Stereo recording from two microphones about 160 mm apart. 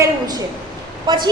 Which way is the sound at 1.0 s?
30° right (ahead or behind).